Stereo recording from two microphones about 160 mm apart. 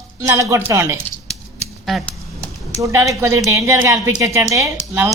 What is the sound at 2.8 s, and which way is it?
A woman's voice, 20° right (ahead or behind).